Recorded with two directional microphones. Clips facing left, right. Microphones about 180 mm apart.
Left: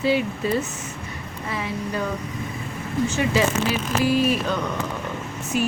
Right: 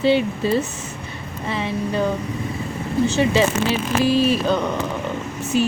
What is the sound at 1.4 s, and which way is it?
Vehicle, 25° right (ahead or behind).